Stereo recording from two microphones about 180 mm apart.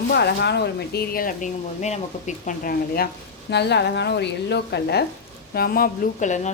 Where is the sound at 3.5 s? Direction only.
70° left (ahead or behind).